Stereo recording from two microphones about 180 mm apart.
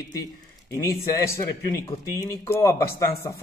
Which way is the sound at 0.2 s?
20° left (ahead or behind).